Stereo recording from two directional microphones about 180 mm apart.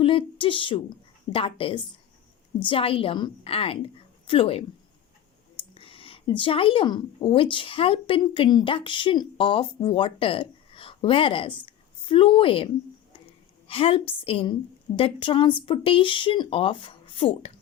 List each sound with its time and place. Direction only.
0.0 s a woman's voice: 30° left (ahead or behind)
13.7 s a woman's voice: 30° left (ahead or behind)